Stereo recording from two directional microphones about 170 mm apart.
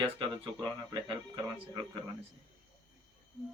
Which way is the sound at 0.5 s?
25° right (ahead or behind).